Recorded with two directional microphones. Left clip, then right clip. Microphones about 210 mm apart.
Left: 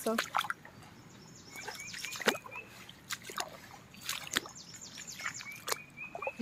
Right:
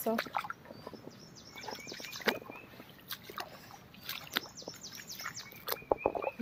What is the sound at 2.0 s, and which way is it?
Rodents, 20° left (ahead or behind).